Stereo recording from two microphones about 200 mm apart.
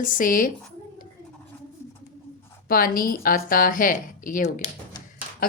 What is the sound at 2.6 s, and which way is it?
A woman's voice, 45° left (ahead or behind).